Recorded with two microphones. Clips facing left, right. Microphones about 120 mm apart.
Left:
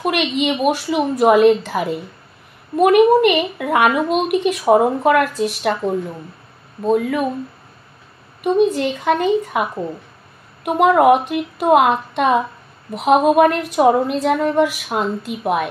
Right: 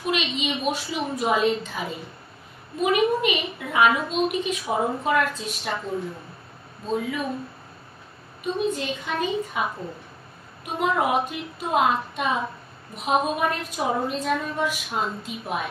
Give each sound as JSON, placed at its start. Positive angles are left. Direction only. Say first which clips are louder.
{"t": 0.0, "sound": "a woman's voice", "louder": "left 8 dB", "side_deg": 60}
{"t": 8.5, "sound": "a woman's voice", "louder": "left 10 dB", "side_deg": 65}